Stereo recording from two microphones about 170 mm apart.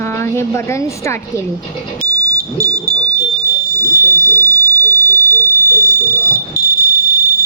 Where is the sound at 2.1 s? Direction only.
20° right (ahead or behind).